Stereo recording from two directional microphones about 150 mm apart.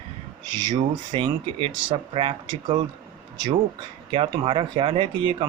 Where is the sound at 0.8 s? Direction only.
35° right (ahead or behind).